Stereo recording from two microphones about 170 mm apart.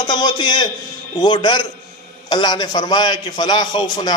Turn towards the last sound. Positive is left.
turn(degrees=25)  # may be behind; listen again after turning